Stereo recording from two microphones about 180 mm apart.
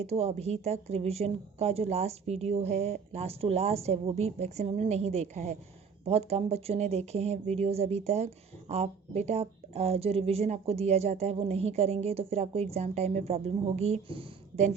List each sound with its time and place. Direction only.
0.0 s speech: 35° right (ahead or behind)